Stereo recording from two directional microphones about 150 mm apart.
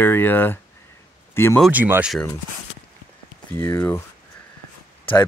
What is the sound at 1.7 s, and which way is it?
Speech, 10° right (ahead or behind).